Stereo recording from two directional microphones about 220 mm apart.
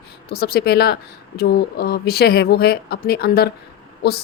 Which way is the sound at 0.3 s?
45° left (ahead or behind).